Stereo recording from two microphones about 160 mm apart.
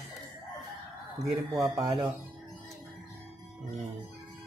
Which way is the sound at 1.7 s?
25° right (ahead or behind).